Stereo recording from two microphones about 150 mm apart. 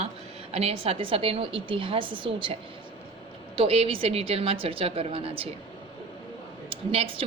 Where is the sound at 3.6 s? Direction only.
40° right (ahead or behind).